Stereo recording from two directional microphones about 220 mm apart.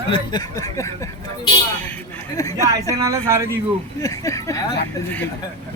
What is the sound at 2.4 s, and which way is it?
Speech, 15° left (ahead or behind).